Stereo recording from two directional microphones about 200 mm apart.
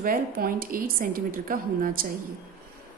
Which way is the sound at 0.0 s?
45° right (ahead or behind).